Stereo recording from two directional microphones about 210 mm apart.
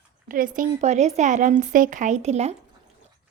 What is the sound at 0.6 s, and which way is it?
Speech, 30° right (ahead or behind).